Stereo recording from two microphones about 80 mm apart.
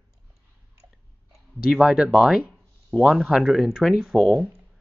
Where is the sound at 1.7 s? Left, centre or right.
Centre.